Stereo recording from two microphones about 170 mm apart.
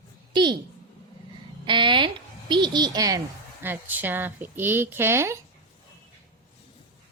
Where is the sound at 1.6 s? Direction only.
30° right (ahead or behind).